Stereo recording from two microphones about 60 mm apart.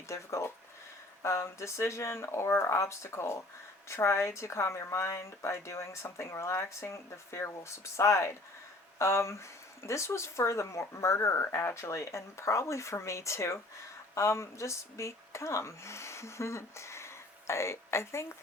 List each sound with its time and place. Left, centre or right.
0.1 s a woman's voice: left